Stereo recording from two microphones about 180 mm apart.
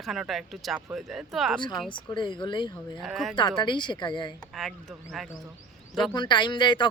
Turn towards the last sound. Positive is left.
turn(degrees=25)  # may be behind; listen again after turning